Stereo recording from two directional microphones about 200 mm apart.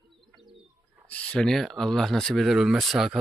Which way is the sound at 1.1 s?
5° left (ahead or behind).